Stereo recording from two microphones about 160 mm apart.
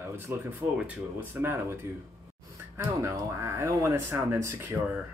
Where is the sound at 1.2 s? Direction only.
15° right (ahead or behind).